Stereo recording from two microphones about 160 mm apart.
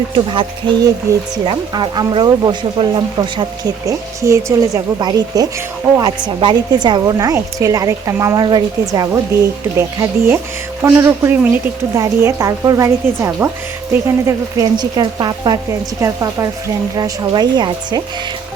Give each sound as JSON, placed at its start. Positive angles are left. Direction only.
{"t": 0.3, "sound": "speech", "side_deg": -30}
{"t": 1.1, "sound": "speech", "side_deg": -15}
{"t": 9.7, "sound": "speech", "side_deg": -15}